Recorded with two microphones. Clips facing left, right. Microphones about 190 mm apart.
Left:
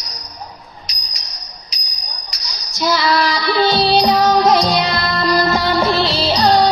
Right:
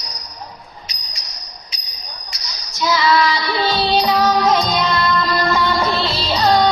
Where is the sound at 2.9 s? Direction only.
35° left (ahead or behind).